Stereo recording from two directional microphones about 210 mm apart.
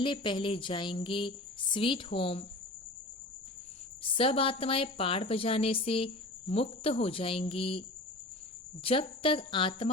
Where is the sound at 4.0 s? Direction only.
25° left (ahead or behind).